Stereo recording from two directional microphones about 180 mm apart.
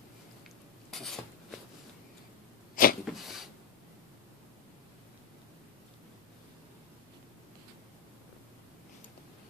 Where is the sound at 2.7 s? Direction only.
50° left (ahead or behind).